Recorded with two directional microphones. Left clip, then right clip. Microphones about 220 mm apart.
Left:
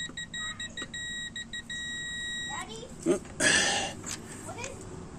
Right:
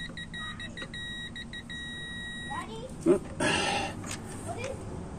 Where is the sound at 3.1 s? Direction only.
20° left (ahead or behind).